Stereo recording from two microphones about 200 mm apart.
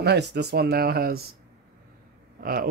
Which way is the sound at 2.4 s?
45° right (ahead or behind).